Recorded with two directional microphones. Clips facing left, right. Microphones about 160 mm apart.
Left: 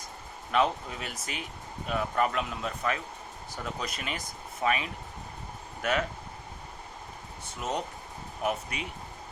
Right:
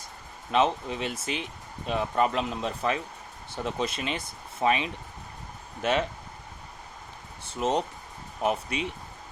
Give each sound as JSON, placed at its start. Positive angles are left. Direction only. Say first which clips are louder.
{"t": 0.5, "sound": "speech", "louder": "right 3 dB", "side_deg": -25}
{"t": 7.4, "sound": "speech", "louder": "right 6 dB", "side_deg": -30}